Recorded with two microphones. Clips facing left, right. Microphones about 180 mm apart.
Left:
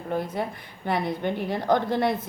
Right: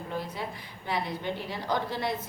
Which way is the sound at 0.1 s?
55° left (ahead or behind).